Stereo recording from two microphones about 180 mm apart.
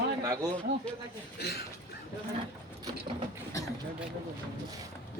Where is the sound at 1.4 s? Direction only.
65° left (ahead or behind).